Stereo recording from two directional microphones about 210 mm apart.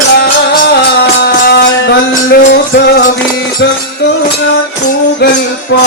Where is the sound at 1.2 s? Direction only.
50° left (ahead or behind).